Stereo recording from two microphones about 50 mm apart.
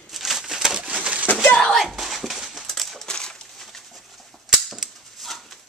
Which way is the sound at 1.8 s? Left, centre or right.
Centre.